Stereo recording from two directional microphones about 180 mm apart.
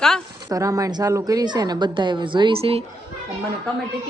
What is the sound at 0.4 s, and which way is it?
A woman's voice, 20° right (ahead or behind).